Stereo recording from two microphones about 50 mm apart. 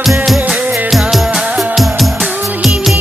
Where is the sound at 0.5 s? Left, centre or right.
Right.